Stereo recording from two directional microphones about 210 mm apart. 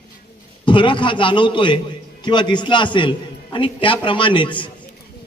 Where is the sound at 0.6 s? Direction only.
25° left (ahead or behind).